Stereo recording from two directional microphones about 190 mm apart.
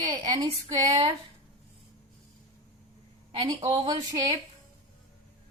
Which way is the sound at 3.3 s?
30° right (ahead or behind).